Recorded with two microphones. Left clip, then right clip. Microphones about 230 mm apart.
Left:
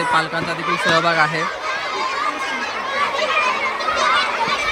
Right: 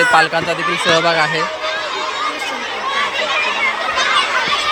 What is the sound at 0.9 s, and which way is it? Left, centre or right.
Speech, centre.